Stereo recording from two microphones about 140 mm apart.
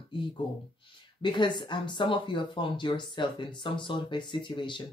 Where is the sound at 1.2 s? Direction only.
35° left (ahead or behind).